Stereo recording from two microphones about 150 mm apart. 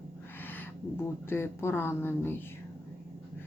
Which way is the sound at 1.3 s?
15° left (ahead or behind).